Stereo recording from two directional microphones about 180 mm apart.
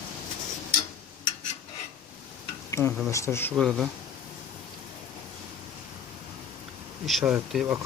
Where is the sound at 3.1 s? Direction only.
15° left (ahead or behind).